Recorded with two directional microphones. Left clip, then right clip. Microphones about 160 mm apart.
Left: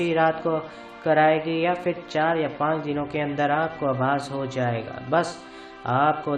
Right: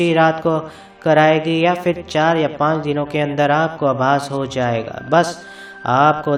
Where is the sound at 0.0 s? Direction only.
35° right (ahead or behind).